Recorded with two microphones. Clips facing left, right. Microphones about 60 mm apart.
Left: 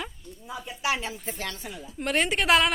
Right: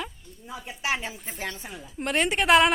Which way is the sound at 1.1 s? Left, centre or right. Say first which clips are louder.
Left 3 dB; centre.